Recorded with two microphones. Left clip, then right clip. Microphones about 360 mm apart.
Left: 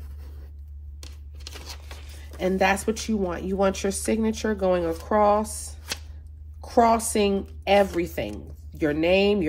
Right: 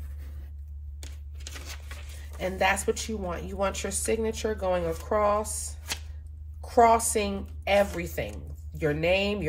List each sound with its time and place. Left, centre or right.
2.4 s a woman's voice: left
6.8 s a woman's voice: left